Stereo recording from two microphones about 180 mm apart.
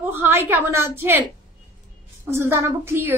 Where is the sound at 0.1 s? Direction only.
10° right (ahead or behind).